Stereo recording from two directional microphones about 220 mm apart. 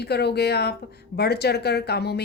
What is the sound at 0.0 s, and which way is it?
A woman's voice, 50° left (ahead or behind).